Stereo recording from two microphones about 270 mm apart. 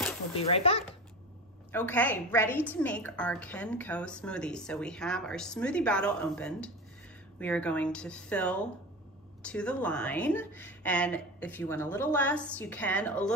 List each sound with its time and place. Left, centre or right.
0.4 s speech: left
1.7 s a woman's voice: centre